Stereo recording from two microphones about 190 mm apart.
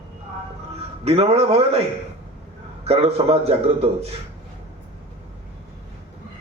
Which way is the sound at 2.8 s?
35° right (ahead or behind).